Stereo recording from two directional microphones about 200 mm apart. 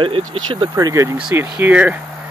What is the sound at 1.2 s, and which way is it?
Speech, 5° right (ahead or behind).